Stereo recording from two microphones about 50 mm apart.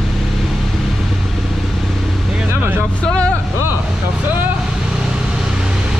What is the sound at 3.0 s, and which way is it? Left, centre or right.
Vehicle, centre.